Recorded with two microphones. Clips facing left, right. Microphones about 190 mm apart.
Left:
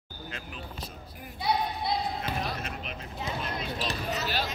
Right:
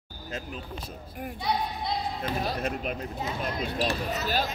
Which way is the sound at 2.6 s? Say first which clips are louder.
Right 8 dB; 50° right (ahead or behind).